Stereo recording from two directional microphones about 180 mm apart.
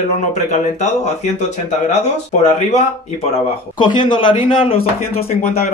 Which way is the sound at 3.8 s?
25° left (ahead or behind).